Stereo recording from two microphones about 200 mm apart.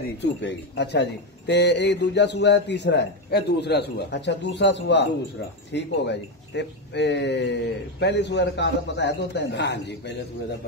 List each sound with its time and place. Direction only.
0.2 s a man's voice: 60° left (ahead or behind)